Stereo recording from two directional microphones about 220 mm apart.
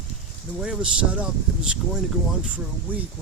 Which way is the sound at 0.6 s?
5° right (ahead or behind).